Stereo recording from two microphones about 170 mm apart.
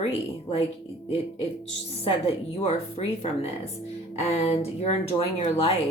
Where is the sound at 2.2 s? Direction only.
35° left (ahead or behind).